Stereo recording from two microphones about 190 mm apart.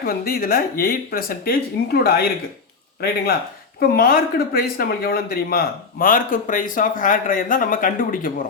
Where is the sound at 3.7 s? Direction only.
50° left (ahead or behind).